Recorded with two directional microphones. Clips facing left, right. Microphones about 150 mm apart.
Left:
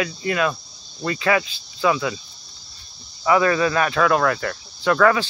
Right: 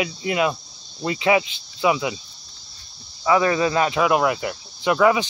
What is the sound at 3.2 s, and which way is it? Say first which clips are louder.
Speech: left 1 dB; 25° right (ahead or behind).